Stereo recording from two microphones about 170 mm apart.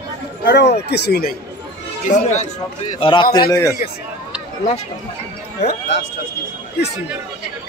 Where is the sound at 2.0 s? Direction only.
45° left (ahead or behind).